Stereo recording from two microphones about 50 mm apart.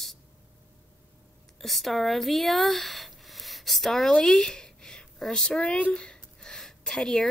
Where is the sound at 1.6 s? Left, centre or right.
Centre.